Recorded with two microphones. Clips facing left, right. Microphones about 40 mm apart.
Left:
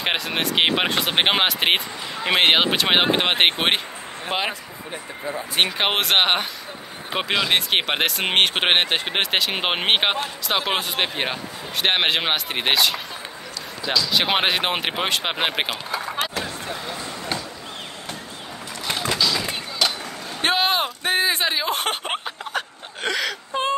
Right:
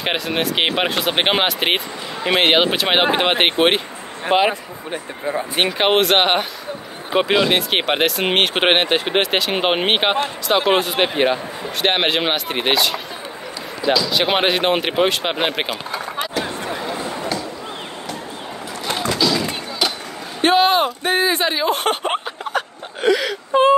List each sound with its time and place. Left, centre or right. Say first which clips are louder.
0.0 s speech: right 3 dB; centre
4.3 s speech: right 9 dB; centre
4.9 s speech: right 6 dB; right
5.6 s speech: right 4 dB; centre
16.4 s a sound: right 5 dB; right
19.1 s a sound: right 4 dB; centre
20.4 s speech: right 6 dB; centre